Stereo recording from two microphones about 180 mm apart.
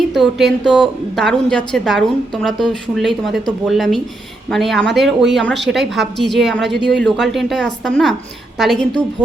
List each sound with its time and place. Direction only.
0.1 s a woman's voice: centre (ahead or behind)